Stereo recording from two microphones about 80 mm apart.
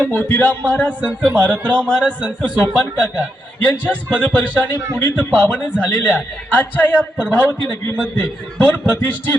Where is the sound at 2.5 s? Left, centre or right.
Centre.